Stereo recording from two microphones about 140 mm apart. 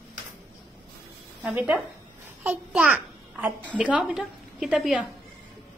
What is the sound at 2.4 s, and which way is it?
A child's voice, 10° right (ahead or behind).